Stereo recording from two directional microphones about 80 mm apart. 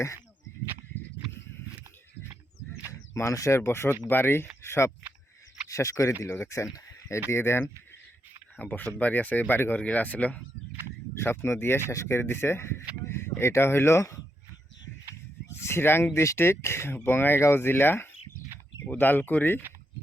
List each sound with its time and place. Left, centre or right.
3.2 s speech: left
8.5 s speech: centre
11.1 s speech: left
15.4 s speech: left